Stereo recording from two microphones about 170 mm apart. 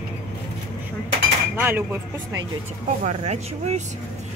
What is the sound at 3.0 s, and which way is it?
Speech, 45° right (ahead or behind).